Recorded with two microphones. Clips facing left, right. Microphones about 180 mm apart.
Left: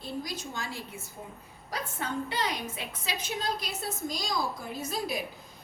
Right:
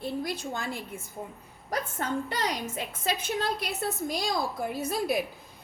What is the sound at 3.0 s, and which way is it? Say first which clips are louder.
A woman's voice: right 4 dB; 55° right (ahead or behind).